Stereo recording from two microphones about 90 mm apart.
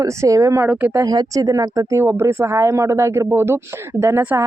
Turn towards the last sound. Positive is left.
turn(degrees=-25)  # may be behind; listen again after turning